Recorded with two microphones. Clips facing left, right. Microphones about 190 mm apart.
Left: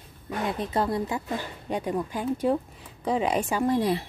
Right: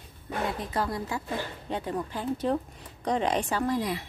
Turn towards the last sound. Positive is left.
turn(degrees=30)  # may be behind; listen again after turning